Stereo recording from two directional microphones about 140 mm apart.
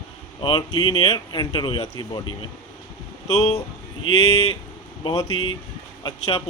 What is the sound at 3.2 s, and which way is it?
Speech, 50° left (ahead or behind).